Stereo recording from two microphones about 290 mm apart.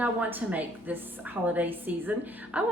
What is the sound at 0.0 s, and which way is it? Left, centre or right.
A woman's voice, centre.